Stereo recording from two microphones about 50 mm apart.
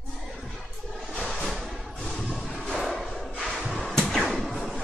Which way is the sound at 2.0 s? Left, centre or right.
Centre.